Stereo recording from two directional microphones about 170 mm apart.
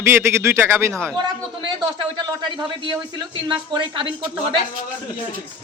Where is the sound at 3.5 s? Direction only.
25° right (ahead or behind).